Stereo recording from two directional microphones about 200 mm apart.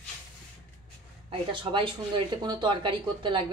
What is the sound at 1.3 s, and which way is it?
Speech, 25° right (ahead or behind).